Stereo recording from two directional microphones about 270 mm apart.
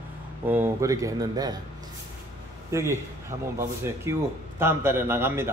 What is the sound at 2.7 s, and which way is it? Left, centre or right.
Speech, centre.